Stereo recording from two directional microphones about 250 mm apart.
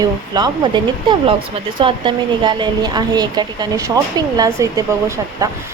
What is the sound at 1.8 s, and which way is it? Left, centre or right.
A woman's voice, centre.